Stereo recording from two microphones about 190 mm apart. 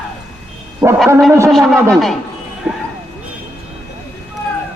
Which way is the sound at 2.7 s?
5° right (ahead or behind).